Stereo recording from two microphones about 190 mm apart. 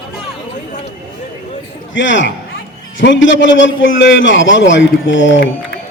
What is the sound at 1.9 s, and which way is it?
Speech, 75° left (ahead or behind).